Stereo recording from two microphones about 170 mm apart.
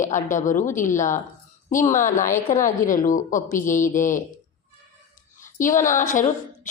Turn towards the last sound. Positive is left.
turn(degrees=50)  # may be behind; listen again after turning